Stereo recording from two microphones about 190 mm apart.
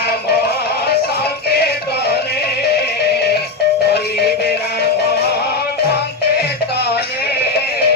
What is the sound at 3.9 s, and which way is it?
Music, 60° left (ahead or behind).